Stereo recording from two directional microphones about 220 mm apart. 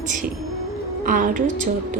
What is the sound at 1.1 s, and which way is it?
Speech, 35° right (ahead or behind).